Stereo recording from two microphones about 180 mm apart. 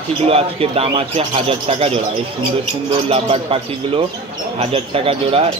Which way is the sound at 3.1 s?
30° right (ahead or behind).